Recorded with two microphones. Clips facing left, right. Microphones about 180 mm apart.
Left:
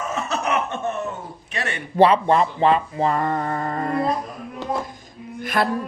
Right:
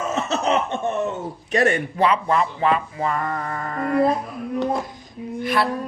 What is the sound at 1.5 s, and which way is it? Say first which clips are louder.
Speech: right 11 dB; 40° right (ahead or behind).